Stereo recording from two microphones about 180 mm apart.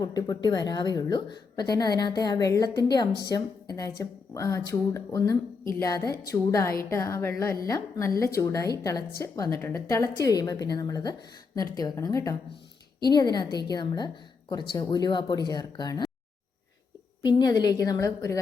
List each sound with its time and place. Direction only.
0.0 s a woman's voice: 20° left (ahead or behind)
17.2 s a woman's voice: 20° left (ahead or behind)